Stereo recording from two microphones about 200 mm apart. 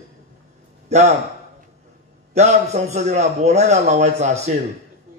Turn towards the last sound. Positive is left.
turn(degrees=-35)  # may be behind; listen again after turning